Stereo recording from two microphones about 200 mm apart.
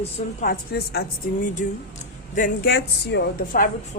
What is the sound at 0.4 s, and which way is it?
Speech, 50° left (ahead or behind).